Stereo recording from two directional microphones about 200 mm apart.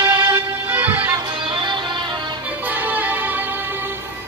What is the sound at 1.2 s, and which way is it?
Music, 25° right (ahead or behind).